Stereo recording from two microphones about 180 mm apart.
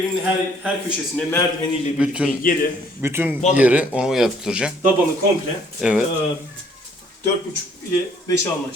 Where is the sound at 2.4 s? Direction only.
50° left (ahead or behind).